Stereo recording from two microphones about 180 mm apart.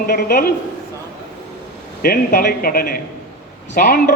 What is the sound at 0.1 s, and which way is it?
Speech, 65° left (ahead or behind).